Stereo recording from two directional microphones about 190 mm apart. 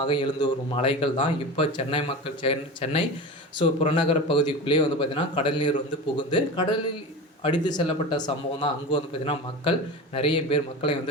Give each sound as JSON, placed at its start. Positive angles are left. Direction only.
{"t": 0.0, "sound": "speech", "side_deg": 25}